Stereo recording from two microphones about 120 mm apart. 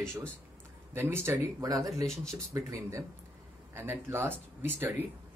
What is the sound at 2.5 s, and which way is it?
Speech, 25° right (ahead or behind).